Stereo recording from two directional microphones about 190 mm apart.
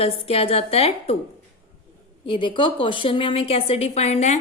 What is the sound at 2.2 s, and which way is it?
A woman's voice, 25° left (ahead or behind).